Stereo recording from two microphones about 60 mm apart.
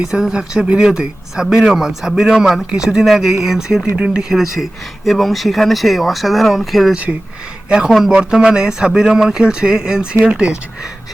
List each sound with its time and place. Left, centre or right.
0.0 s speech: centre
4.4 s speech: centre
6.9 s speech: right
7.9 s speech: centre
8.1 s speech: centre